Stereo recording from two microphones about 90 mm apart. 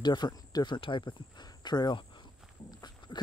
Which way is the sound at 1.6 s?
50° left (ahead or behind).